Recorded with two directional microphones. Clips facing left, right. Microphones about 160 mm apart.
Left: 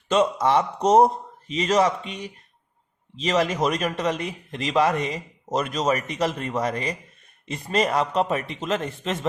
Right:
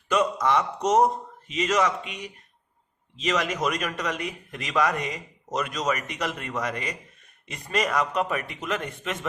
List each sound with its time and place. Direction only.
0.1 s speech: 30° left (ahead or behind)